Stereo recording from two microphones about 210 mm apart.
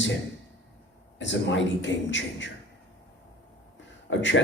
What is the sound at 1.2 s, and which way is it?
A man's voice, 60° left (ahead or behind).